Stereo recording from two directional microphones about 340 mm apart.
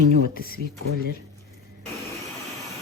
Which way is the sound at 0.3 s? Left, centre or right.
Left.